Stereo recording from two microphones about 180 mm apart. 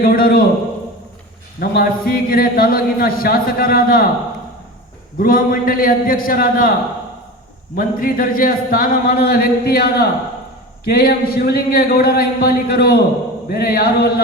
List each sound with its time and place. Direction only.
0.0 s a man's voice: 55° left (ahead or behind)
1.5 s a man's voice: 55° left (ahead or behind)
5.2 s a man's voice: 50° left (ahead or behind)
7.8 s a man's voice: 50° left (ahead or behind)